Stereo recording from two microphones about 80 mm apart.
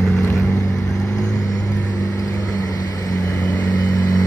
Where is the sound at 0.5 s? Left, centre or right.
Left.